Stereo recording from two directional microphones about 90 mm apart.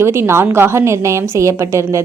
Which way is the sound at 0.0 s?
30° right (ahead or behind).